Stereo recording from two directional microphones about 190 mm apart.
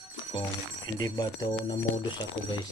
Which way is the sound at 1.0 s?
20° left (ahead or behind).